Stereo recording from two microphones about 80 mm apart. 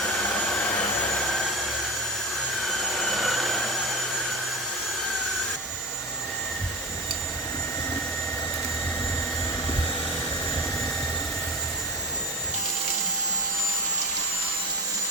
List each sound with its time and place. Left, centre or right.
0.2 s vacuum cleaner: centre
0.6 s jet engine: left
1.1 s vehicle: centre
2.6 s a sound: centre